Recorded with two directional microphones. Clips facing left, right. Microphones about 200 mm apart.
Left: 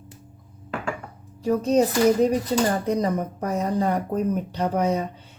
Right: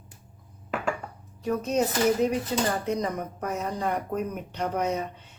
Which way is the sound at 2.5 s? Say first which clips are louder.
Left 5 dB; 35° left (ahead or behind).